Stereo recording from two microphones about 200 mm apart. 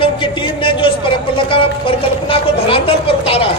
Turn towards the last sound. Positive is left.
turn(degrees=30)  # may be behind; listen again after turning